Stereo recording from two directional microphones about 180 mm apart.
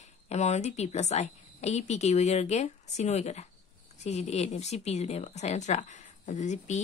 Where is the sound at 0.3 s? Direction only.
40° left (ahead or behind).